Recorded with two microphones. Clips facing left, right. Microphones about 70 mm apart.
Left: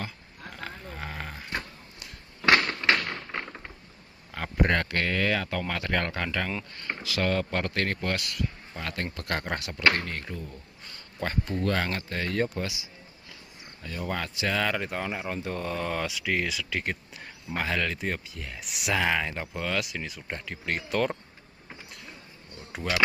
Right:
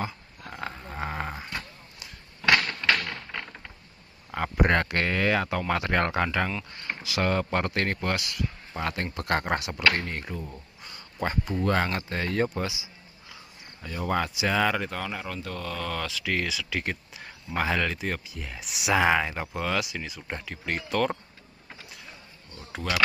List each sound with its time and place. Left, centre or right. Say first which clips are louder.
0.0 s dog: right 4 dB; right
2.6 s typewriter: left 1 dB; centre
4.3 s speech: right 2 dB; centre
8.8 s speech: right 3 dB; right
11.7 s speech: right 3 dB; right
13.8 s speech: right 5 dB; centre
15.0 s speech: left 1 dB; centre
15.2 s speech: left 2 dB; left
16.1 s speech: even; centre
18.9 s speech: right 4 dB; centre
22.7 s speech: even; centre